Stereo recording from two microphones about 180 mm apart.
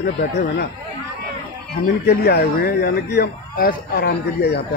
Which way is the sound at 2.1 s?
65° left (ahead or behind).